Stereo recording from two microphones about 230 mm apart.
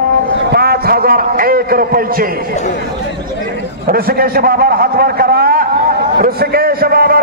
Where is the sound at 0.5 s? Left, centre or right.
Right.